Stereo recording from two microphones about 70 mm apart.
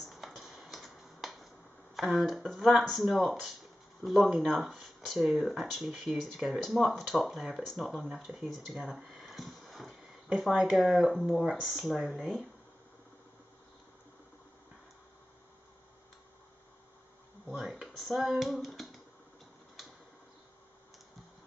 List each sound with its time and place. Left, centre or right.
0.0 s finger snapping: centre
2.0 s speech: centre
17.6 s speech: centre
19.8 s a sound: centre